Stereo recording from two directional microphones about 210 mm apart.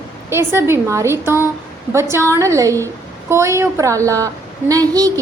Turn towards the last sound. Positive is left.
turn(degrees=-15)  # may be behind; listen again after turning